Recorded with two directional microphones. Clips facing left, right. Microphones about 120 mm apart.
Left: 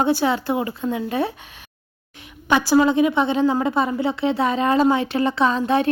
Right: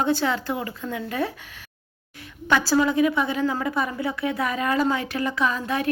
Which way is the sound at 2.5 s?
20° left (ahead or behind).